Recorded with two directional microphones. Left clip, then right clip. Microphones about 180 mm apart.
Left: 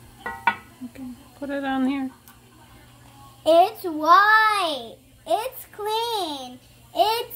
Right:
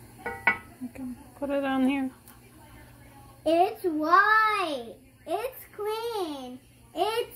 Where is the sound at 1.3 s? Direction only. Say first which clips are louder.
Left 1 dB; 15° left (ahead or behind).